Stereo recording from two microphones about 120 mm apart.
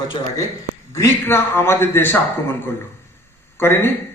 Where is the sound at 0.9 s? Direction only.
20° left (ahead or behind).